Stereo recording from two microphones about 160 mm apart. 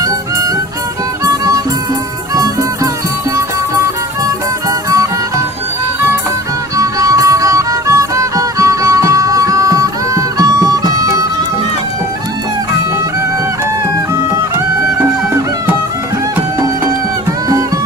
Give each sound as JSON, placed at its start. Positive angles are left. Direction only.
{"t": 1.2, "sound": "music", "side_deg": -20}
{"t": 6.7, "sound": "music", "side_deg": -20}